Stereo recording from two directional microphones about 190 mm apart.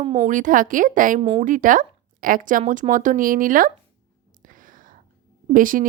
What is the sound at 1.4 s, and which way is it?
Speech, 45° right (ahead or behind).